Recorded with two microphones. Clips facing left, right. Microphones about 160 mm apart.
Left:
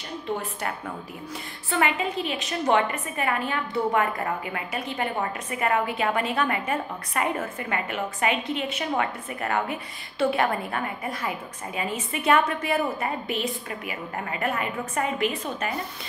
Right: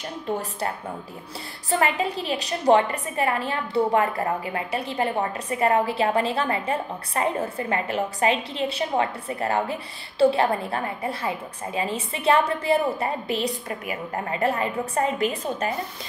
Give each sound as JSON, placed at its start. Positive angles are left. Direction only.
{"t": 0.4, "sound": "a woman's voice", "side_deg": -35}